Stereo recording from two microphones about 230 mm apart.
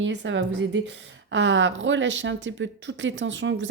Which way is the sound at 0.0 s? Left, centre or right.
Right.